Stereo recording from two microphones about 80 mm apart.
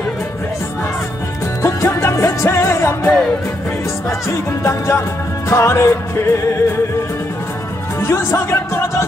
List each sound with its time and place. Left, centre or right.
1.6 s music: left
4.3 s speech: left
8.0 s speech: left